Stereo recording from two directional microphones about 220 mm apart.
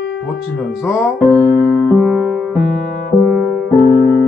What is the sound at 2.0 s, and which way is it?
Music, centre (ahead or behind).